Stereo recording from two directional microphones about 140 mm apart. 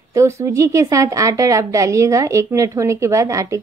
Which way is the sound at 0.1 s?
20° right (ahead or behind).